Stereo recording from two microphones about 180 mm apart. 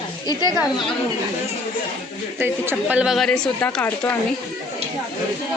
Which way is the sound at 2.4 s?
10° right (ahead or behind).